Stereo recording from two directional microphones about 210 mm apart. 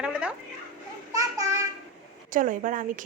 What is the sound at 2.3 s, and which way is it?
Speech, 40° right (ahead or behind).